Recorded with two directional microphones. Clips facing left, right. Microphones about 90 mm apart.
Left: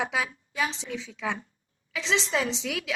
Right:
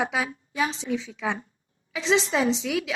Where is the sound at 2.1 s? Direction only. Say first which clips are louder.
Right 5 dB; 30° right (ahead or behind).